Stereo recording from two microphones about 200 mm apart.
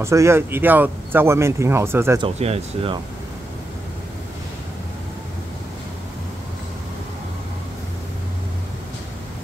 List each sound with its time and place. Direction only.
0.0 s speech: 15° right (ahead or behind)
2.2 s speech: 30° right (ahead or behind)